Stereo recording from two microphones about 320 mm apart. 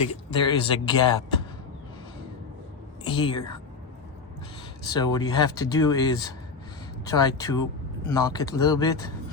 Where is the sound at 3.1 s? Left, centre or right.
Centre.